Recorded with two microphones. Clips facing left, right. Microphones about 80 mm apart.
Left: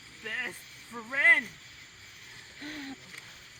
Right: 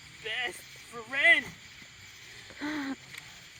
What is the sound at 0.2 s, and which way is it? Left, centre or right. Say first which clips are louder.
Speech: right 1 dB; left.